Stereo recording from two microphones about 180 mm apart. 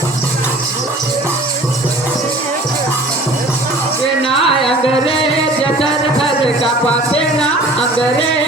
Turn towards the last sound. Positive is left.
turn(degrees=30)  # may be behind; listen again after turning